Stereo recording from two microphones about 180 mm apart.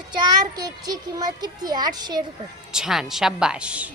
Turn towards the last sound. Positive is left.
turn(degrees=-5)  # may be behind; listen again after turning